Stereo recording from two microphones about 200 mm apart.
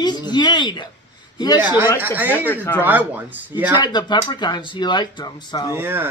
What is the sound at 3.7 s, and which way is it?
Speech, 20° left (ahead or behind).